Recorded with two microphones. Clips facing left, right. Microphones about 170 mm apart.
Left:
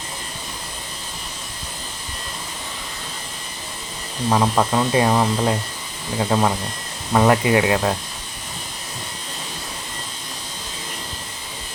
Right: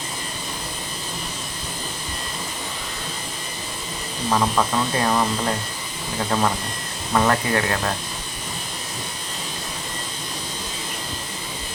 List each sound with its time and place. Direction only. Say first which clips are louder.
4.3 s speech: left 3 dB; 15° left (ahead or behind)
6.3 s speech: left 2 dB; 15° left (ahead or behind)